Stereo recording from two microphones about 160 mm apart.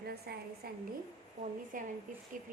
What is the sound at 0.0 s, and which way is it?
Speech, 80° right.